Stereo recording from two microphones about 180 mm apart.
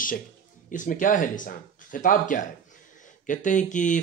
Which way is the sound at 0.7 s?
45° left (ahead or behind).